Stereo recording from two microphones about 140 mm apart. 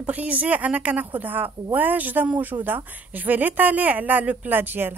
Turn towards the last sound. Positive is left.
turn(degrees=-15)  # may be behind; listen again after turning